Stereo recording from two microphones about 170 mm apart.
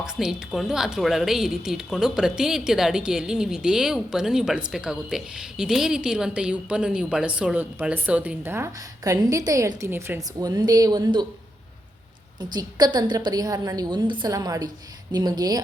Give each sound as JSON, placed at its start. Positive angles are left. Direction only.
{"t": 0.0, "sound": "a woman's voice", "side_deg": -5}
{"t": 12.5, "sound": "a woman's voice", "side_deg": -25}